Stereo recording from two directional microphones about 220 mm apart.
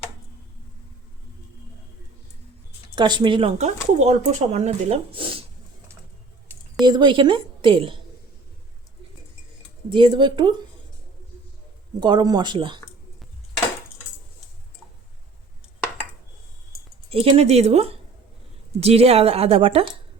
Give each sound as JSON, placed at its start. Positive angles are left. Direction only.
{"t": 2.9, "sound": "speech", "side_deg": -20}
{"t": 6.8, "sound": "speech", "side_deg": -20}
{"t": 9.9, "sound": "speech", "side_deg": -20}
{"t": 11.9, "sound": "speech", "side_deg": -20}
{"t": 17.1, "sound": "speech", "side_deg": -25}